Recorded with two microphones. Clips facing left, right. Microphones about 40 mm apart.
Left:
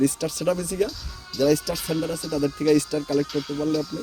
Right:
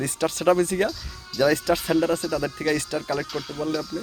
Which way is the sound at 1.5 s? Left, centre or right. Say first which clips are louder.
Right 1 dB; right.